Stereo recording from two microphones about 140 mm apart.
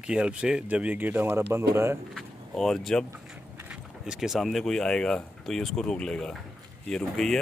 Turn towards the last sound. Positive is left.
turn(degrees=5)  # may be behind; listen again after turning